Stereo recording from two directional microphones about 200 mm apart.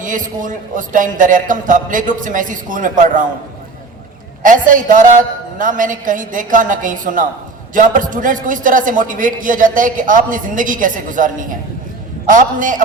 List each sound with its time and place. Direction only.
0.0 s a man's voice: 40° right (ahead or behind)
4.4 s a man's voice: 40° right (ahead or behind)